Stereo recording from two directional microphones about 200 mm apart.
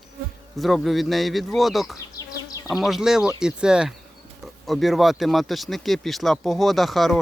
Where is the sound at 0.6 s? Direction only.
Centre (ahead or behind).